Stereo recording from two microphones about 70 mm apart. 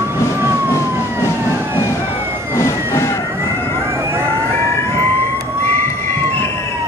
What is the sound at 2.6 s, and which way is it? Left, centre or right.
Vehicle, left.